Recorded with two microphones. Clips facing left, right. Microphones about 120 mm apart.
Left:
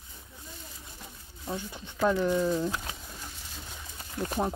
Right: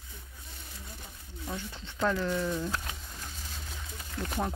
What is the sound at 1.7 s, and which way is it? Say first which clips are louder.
Speech: left 3 dB; 15° left (ahead or behind).